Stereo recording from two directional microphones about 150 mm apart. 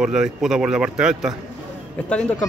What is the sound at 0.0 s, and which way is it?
Speech, 5° right (ahead or behind).